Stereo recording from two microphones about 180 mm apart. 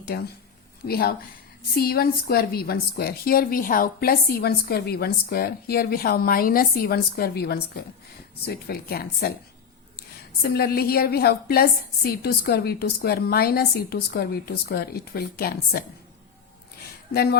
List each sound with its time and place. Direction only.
0.1 s a woman's voice: 60° left (ahead or behind)
10.4 s a woman's voice: 60° left (ahead or behind)